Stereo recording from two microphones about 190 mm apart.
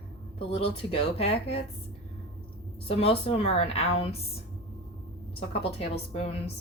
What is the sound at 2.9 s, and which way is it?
A woman's voice, 30° left (ahead or behind).